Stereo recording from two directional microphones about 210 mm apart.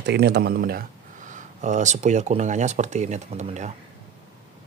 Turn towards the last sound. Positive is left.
turn(degrees=-35)  # may be behind; listen again after turning